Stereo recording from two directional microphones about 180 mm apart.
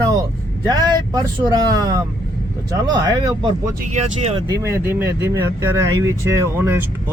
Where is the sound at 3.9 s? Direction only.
40° right (ahead or behind).